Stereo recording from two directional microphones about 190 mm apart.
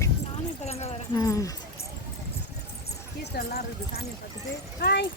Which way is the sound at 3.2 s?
55° left (ahead or behind).